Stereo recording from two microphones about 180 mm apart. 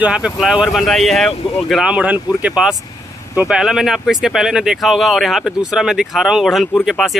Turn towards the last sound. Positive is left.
turn(degrees=0)  # may be behind; listen again after turning